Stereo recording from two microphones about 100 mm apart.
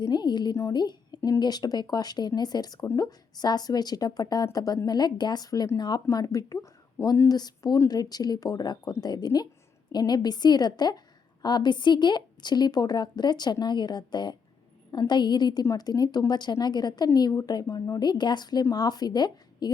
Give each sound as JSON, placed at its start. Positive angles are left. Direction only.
{"t": 0.0, "sound": "a woman's voice", "side_deg": 45}